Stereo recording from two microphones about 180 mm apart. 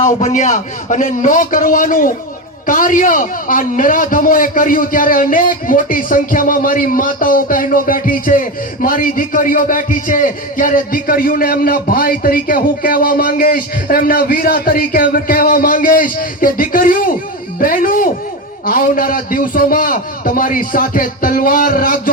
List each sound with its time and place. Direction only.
0.0 s a man's voice: 40° left (ahead or behind)